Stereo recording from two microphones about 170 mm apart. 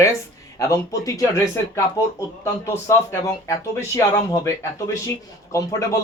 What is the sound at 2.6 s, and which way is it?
Speech, 15° left (ahead or behind).